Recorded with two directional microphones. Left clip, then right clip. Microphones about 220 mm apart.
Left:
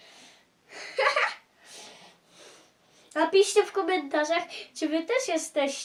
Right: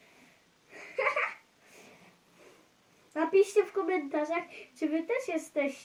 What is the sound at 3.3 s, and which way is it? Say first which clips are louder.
A woman's voice: left 3 dB; 30° left (ahead or behind).